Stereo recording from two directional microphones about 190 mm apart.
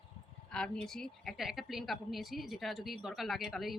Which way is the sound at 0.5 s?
5° left (ahead or behind).